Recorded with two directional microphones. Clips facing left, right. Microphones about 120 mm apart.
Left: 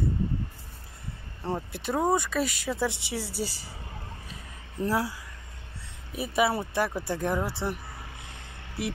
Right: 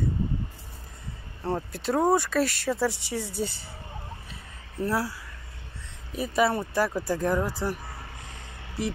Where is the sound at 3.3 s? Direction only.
85° left.